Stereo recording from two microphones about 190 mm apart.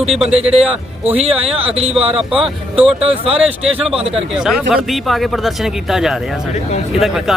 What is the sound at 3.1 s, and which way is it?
Speech, 30° right (ahead or behind).